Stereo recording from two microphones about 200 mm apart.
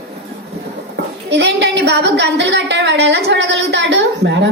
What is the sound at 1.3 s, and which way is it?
A woman's voice, 60° right (ahead or behind).